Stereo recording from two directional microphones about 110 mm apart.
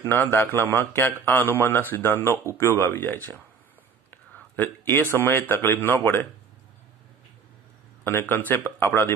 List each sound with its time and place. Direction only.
0.0 s a man's voice: 20° left (ahead or behind)
8.0 s a man's voice: 20° left (ahead or behind)